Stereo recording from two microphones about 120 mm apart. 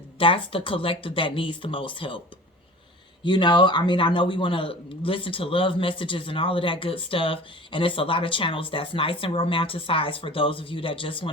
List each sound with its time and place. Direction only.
0.2 s a man's voice: 45° left (ahead or behind)
3.2 s a man's voice: 40° left (ahead or behind)